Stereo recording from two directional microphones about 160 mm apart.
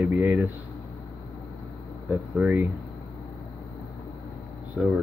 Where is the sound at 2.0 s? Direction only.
10° right (ahead or behind).